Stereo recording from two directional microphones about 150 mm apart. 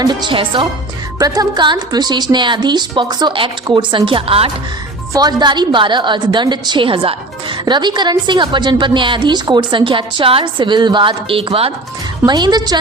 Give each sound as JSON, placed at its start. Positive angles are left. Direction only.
{"t": 0.0, "sound": "a woman's voice", "side_deg": -30}